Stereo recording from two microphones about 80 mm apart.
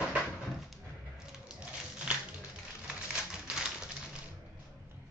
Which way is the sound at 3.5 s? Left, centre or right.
Centre.